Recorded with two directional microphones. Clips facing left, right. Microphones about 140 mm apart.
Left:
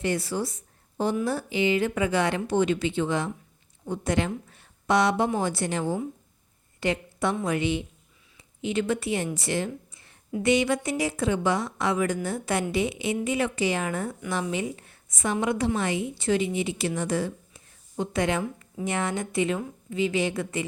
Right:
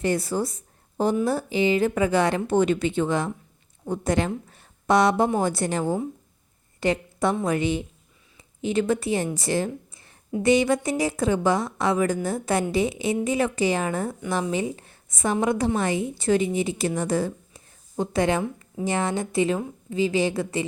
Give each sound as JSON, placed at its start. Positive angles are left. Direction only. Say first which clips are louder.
{"t": 0.0, "sound": "a woman's voice", "louder": "right 3 dB", "side_deg": -40}
{"t": 1.1, "sound": "a woman's voice", "louder": "right 3 dB", "side_deg": -35}